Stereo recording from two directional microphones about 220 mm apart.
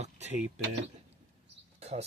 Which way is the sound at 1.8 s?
30° right (ahead or behind).